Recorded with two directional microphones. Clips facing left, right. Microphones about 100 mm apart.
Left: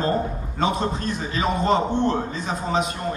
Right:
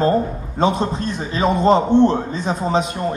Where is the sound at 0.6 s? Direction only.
30° right (ahead or behind).